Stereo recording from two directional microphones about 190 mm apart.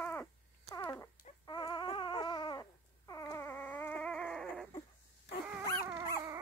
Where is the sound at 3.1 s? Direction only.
15° left (ahead or behind).